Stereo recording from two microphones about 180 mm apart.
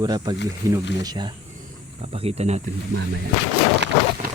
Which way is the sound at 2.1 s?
35° right (ahead or behind).